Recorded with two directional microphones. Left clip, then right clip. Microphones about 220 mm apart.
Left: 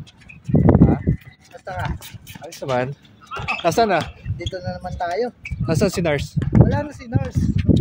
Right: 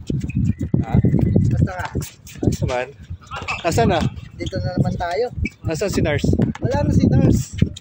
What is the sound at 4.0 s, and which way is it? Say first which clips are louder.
Speech: right 2 dB; 10° right (ahead or behind).